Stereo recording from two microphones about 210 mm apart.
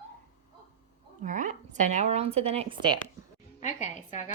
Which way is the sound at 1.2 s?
35° right (ahead or behind).